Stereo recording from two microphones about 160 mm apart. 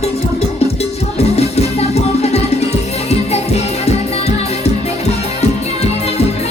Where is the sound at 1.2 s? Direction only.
40° left (ahead or behind).